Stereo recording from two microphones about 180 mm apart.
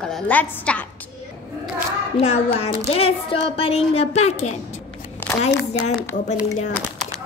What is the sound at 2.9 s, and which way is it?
A woman's voice, 30° left (ahead or behind).